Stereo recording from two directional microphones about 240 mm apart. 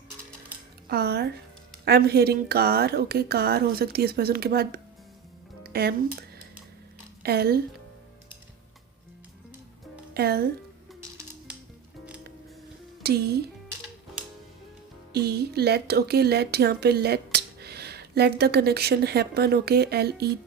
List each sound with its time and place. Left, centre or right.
0.9 s a woman's voice: right
7.2 s a woman's voice: right
10.2 s a woman's voice: right
13.0 s speech: right
15.1 s a woman's voice: right